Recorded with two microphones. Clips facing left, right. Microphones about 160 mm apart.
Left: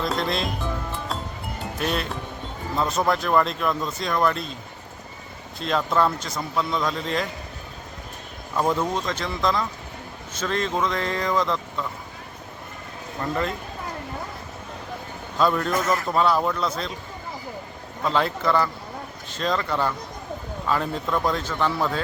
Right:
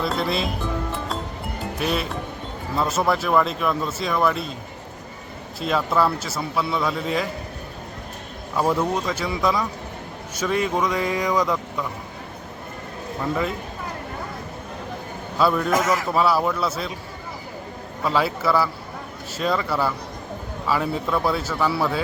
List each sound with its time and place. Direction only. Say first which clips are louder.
0.0 s speech: right 1 dB; 5° right (ahead or behind)
1.8 s speech: right 2 dB; 5° right (ahead or behind)
5.5 s speech: right 1 dB; 5° right (ahead or behind)
8.5 s speech: right 2 dB; 5° right (ahead or behind)
15.4 s speech: right 1 dB; 5° right (ahead or behind)
15.7 s a man's voice: right 3 dB; 90° right
16.1 s speech: even; 5° right (ahead or behind)
18.0 s speech: right 1 dB; 5° right (ahead or behind)